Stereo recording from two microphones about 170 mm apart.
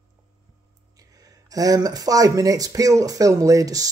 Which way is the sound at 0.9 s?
20° right (ahead or behind).